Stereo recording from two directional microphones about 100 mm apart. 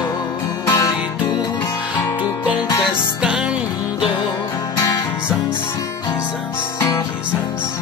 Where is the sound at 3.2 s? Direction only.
10° right (ahead or behind).